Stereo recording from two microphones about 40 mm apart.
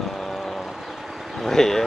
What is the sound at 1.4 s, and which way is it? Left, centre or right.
Speech, centre.